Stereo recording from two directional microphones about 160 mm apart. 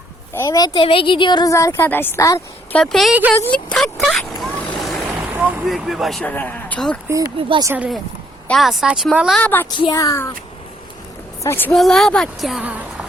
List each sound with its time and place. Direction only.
0.3 s a woman's voice: 20° left (ahead or behind)
2.7 s speech: centre (ahead or behind)
3.3 s vehicle: 10° left (ahead or behind)
5.1 s vehicle: 10° right (ahead or behind)
5.6 s speech: centre (ahead or behind)
7.3 s speech: 35° right (ahead or behind)
7.6 s speech: 15° right (ahead or behind)
8.4 s speech: centre (ahead or behind)
9.4 s a woman's voice: 10° left (ahead or behind)
9.6 s a woman's voice: 25° left (ahead or behind)
11.4 s a woman's voice: 15° left (ahead or behind)
11.7 s speech: centre (ahead or behind)